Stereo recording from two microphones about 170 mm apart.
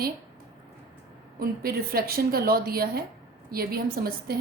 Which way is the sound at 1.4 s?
60° right (ahead or behind).